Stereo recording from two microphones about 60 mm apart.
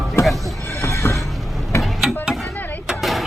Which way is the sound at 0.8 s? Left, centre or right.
Left.